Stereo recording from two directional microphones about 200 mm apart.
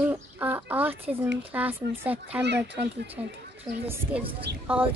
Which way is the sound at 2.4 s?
60° right (ahead or behind).